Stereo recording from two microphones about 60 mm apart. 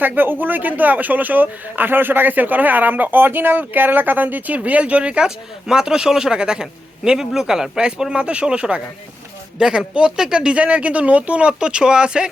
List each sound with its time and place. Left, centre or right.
0.0 s speech: right; by 12.3 s centre